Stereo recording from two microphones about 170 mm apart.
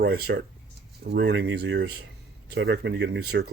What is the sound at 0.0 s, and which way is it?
Speech, 70° right (ahead or behind).